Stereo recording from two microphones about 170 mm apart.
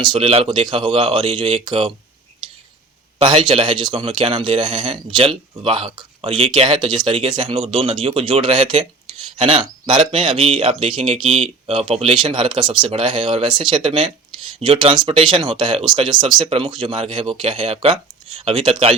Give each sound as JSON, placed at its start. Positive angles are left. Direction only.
{"t": 0.0, "sound": "speech", "side_deg": -35}
{"t": 3.2, "sound": "speech", "side_deg": -30}